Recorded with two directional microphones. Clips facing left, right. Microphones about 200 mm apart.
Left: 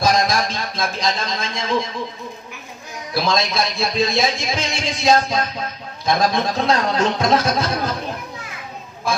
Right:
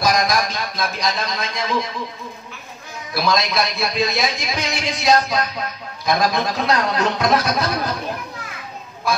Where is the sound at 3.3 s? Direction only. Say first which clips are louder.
Right 1 dB; 25° left (ahead or behind).